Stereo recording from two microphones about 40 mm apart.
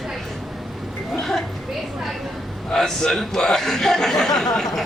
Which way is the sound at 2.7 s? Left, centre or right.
Centre.